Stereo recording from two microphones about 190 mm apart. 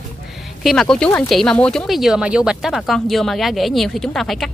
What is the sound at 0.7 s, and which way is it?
Speech, 5° left (ahead or behind).